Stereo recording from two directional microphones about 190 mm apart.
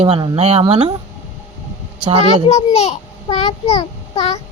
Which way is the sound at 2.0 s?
30° right (ahead or behind).